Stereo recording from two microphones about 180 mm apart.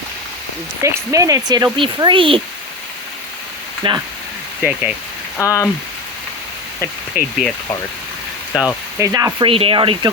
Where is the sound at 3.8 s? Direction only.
30° right (ahead or behind).